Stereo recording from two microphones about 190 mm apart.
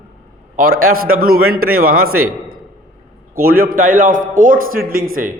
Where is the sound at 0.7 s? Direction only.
90° right.